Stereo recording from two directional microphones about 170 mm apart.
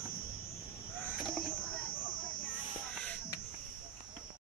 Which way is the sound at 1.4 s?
55° left (ahead or behind).